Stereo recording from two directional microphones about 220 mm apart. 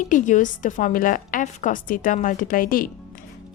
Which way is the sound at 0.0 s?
35° left (ahead or behind).